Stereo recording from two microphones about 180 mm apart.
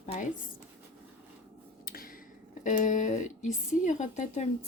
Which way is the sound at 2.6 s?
45° left (ahead or behind).